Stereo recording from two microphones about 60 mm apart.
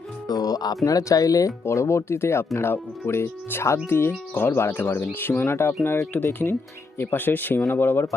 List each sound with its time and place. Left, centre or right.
0.3 s speech: left
0.9 s speech: left
1.6 s speech: left
3.8 s speech: left